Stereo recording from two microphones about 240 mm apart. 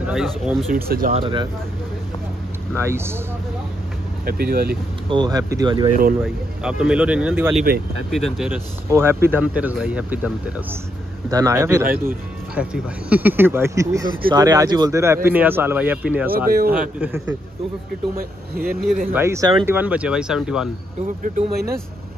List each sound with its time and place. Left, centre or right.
0.0 s speech: centre
0.8 s speech: right
1.1 s speech: centre
2.7 s speech: centre
4.3 s speech: right
5.1 s speech: centre
6.2 s speech: centre
16.4 s speech: right
16.7 s speech: centre
18.1 s speech: right
19.1 s speech: centre
21.4 s speech: right